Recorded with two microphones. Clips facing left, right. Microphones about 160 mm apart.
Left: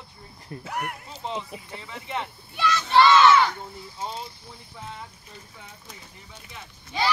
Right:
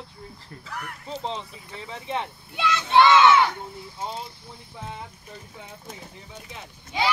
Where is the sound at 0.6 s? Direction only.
65° left (ahead or behind).